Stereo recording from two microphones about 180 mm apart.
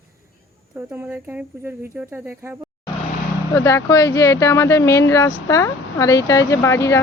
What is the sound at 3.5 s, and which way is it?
Speech, 15° left (ahead or behind).